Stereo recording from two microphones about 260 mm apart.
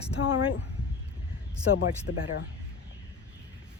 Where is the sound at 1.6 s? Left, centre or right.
Left.